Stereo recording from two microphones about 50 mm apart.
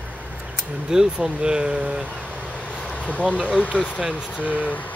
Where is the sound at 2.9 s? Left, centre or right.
Left.